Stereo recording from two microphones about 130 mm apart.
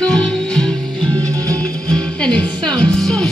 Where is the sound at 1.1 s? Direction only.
25° right (ahead or behind).